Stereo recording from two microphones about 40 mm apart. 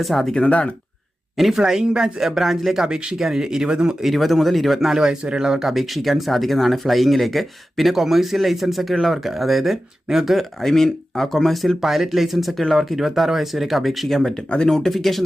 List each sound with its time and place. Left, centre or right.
0.0 s speech: centre
0.3 s speech: left
1.4 s speech: centre
4.0 s speech: centre
4.9 s speech: right
5.7 s speech: centre
10.6 s speech: centre